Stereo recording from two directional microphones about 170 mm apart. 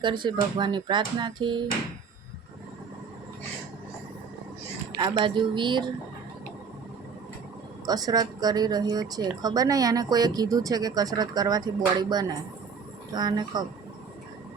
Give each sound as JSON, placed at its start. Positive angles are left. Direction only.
{"t": 0.0, "sound": "speech", "side_deg": -25}
{"t": 4.9, "sound": "speech", "side_deg": -25}
{"t": 7.9, "sound": "speech", "side_deg": -20}